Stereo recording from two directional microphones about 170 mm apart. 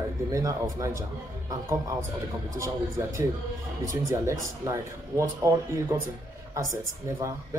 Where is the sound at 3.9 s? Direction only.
20° right (ahead or behind).